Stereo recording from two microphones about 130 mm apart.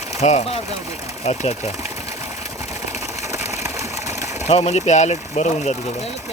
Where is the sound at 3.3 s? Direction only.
20° right (ahead or behind).